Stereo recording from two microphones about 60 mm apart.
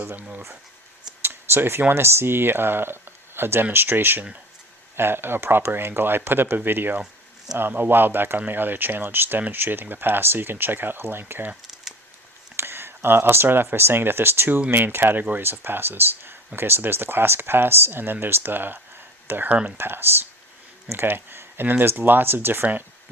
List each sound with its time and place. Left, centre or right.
0.2 s speech: right
1.2 s a sound: right
1.9 s speech: right
12.5 s speech: right
19.5 s speech: right
19.7 s speech: right